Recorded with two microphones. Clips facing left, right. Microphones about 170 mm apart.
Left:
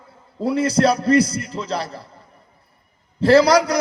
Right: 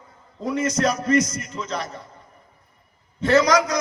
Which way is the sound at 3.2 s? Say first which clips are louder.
Left 4 dB; 30° left (ahead or behind).